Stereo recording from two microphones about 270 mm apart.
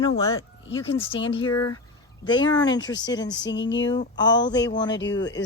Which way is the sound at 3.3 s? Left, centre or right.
Left.